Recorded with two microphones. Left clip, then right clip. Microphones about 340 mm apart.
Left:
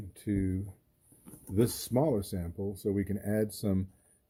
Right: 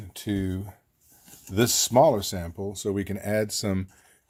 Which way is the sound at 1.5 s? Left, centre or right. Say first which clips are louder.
Right 9 dB; right.